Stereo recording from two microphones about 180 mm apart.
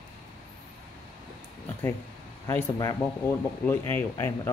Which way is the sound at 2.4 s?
15° left (ahead or behind).